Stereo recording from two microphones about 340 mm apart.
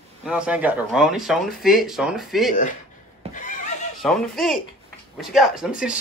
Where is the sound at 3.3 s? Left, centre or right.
Left.